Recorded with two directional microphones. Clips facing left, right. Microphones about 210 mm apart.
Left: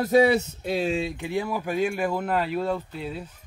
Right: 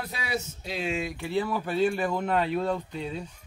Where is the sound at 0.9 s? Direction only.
30° left (ahead or behind).